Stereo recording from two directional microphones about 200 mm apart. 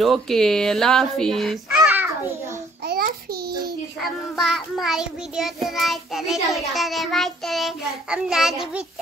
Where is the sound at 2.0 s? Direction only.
15° right (ahead or behind).